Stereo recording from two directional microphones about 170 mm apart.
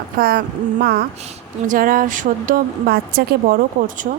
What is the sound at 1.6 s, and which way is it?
A woman's voice, 55° right (ahead or behind).